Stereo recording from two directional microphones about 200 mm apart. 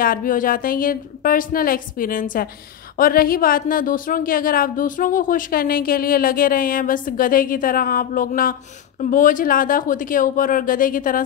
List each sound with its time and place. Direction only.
0.0 s a woman's voice: 45° left (ahead or behind)